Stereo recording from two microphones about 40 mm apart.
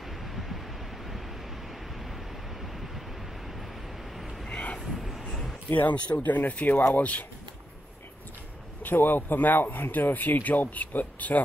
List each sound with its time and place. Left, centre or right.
0.2 s a sound: centre
2.6 s vehicle: centre
4.5 s vehicle: left
4.7 s vehicle: centre
5.7 s speech: left
6.5 s speech: left
8.8 s speech: left